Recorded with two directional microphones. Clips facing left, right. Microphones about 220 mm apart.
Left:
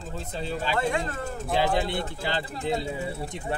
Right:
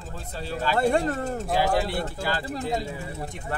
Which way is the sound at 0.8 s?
35° right (ahead or behind).